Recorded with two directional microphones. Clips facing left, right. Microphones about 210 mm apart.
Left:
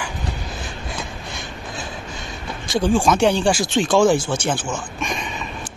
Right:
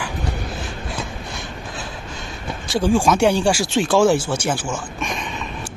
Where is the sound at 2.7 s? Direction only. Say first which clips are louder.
Even; 10° right (ahead or behind).